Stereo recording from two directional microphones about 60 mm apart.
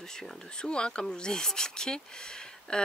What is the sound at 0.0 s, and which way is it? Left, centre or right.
Speech, centre.